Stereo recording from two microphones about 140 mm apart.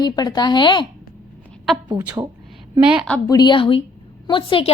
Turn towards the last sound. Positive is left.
turn(degrees=40)  # may be behind; listen again after turning